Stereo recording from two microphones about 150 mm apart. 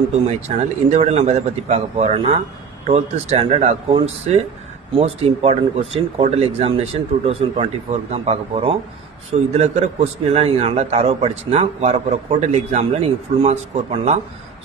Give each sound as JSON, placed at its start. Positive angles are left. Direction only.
{"t": 0.8, "sound": "a man's voice", "side_deg": -45}